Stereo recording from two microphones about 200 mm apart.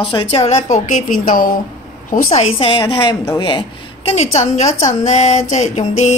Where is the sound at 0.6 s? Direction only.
35° left (ahead or behind).